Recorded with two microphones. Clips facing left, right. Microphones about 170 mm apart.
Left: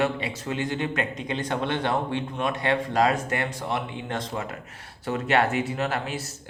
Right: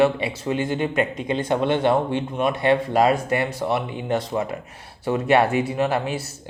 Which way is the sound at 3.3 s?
10° right (ahead or behind).